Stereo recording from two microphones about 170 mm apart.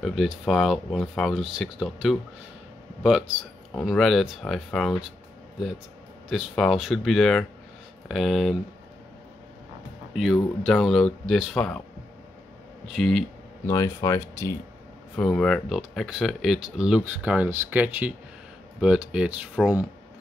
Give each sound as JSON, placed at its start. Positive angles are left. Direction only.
{"t": 0.0, "sound": "speech", "side_deg": 0}
{"t": 6.2, "sound": "speech", "side_deg": 0}
{"t": 10.1, "sound": "speech", "side_deg": -5}
{"t": 12.8, "sound": "speech", "side_deg": 0}
{"t": 13.7, "sound": "speech", "side_deg": 20}
{"t": 15.1, "sound": "speech", "side_deg": 5}